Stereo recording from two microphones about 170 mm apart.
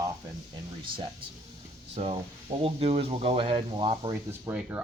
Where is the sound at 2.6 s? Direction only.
35° right (ahead or behind).